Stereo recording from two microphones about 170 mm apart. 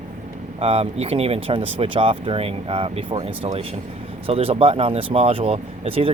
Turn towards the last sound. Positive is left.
turn(degrees=-35)  # may be behind; listen again after turning